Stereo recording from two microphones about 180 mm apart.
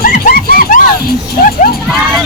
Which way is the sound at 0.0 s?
50° left (ahead or behind).